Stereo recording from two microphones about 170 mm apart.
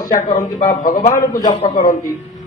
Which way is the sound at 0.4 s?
50° left (ahead or behind).